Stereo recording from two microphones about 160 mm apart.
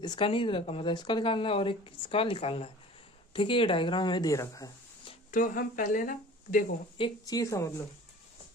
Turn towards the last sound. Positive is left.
turn(degrees=20)  # may be behind; listen again after turning